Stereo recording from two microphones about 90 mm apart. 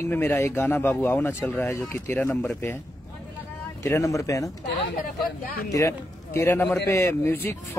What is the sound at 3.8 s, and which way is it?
Speech, 35° left (ahead or behind).